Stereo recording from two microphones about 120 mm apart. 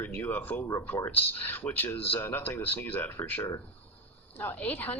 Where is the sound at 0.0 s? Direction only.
15° left (ahead or behind).